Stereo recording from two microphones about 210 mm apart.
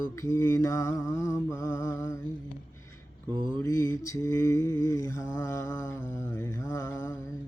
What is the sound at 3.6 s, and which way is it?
Mantra, 15° left (ahead or behind).